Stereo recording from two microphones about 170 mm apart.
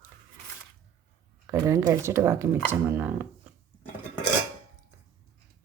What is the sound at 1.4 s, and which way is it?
Speech, 15° right (ahead or behind).